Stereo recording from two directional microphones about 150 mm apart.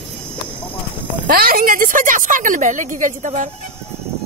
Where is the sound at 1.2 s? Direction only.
75° right (ahead or behind); by 3.4 s 55° right (ahead or behind).